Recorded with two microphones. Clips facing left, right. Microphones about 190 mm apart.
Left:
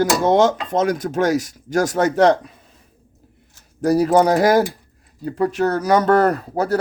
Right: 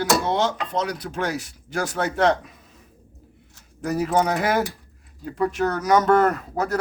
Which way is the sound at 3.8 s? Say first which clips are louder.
Left 7 dB; 35° left (ahead or behind).